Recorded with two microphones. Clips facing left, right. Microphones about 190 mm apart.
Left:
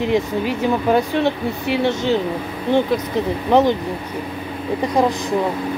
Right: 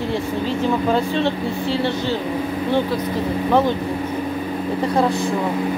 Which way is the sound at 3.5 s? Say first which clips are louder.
Left 3 dB; 20° left (ahead or behind).